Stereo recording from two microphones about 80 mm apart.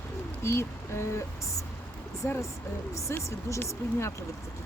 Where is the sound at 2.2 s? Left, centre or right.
Left.